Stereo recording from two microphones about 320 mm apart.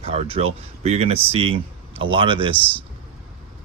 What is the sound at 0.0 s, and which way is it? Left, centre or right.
Speech, centre.